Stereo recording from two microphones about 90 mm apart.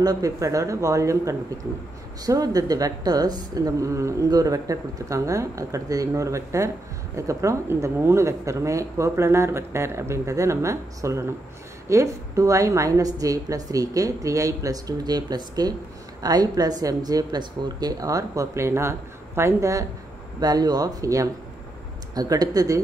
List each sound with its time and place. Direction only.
0.0 s speech: 40° right (ahead or behind)
20.3 s speech: 45° right (ahead or behind)